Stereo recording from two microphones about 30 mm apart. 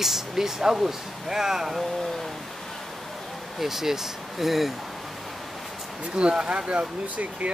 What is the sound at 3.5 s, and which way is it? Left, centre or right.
Speech, centre.